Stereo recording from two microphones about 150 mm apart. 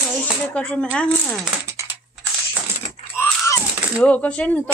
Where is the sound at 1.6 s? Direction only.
15° right (ahead or behind).